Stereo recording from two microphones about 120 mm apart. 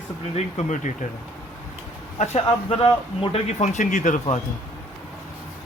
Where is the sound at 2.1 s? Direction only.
65° left (ahead or behind).